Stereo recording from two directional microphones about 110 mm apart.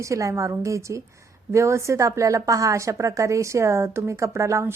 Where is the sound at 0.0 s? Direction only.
30° right (ahead or behind).